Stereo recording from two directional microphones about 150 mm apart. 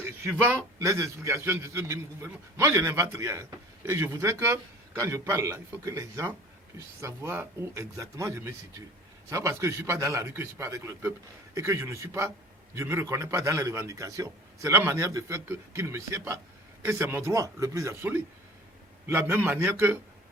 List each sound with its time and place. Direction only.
0.0 s a man's voice: 15° right (ahead or behind)